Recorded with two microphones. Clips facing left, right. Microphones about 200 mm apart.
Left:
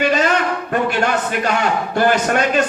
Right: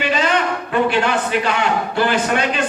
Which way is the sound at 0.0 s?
45° left (ahead or behind).